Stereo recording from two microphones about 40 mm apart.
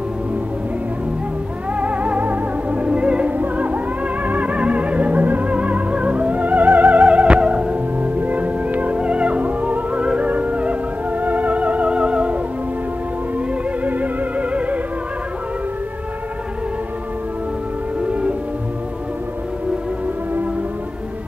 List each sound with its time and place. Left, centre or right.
1.8 s music: right
13.8 s music: right
18.0 s music: right